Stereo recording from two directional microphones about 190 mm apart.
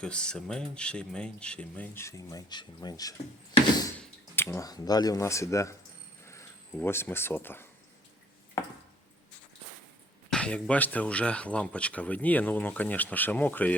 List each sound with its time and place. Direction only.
0.0 s speech: 5° left (ahead or behind)
4.4 s speech: 15° left (ahead or behind)
6.7 s speech: 10° left (ahead or behind)
10.2 s speech: 5° left (ahead or behind)